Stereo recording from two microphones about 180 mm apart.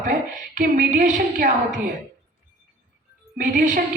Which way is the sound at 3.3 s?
45° right (ahead or behind).